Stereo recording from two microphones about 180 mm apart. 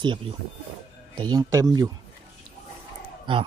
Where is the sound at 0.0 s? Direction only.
25° right (ahead or behind).